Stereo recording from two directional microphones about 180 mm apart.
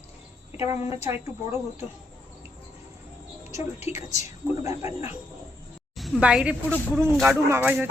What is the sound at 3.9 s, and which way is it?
Speech, 35° left (ahead or behind).